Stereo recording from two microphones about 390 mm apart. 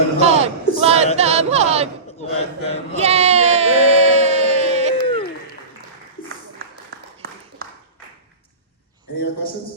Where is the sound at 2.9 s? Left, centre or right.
Centre.